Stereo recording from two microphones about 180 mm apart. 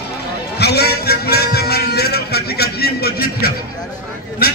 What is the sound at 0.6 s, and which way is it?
Music, 65° left (ahead or behind).